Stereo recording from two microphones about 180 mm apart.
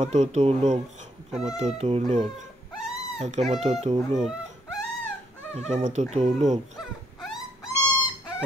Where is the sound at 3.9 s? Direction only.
40° right (ahead or behind).